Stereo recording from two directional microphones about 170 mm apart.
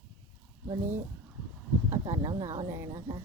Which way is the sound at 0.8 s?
10° right (ahead or behind).